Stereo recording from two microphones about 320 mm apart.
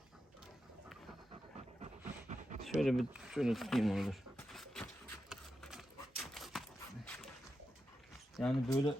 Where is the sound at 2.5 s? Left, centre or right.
Right.